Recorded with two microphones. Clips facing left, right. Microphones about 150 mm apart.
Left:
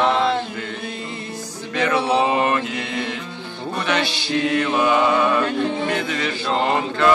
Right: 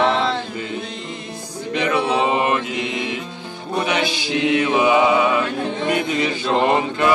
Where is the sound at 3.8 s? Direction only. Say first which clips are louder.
Right 2 dB; 10° right (ahead or behind).